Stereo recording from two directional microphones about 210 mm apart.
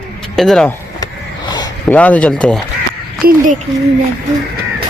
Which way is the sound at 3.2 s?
45° right (ahead or behind).